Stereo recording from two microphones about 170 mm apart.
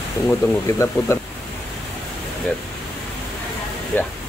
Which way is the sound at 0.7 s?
15° left (ahead or behind).